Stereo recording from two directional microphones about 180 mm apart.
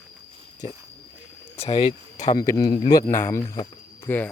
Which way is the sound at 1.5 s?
35° left (ahead or behind).